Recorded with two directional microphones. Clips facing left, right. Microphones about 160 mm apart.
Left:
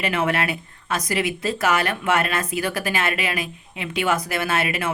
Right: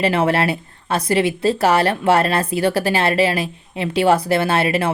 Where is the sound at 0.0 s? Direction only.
30° right (ahead or behind).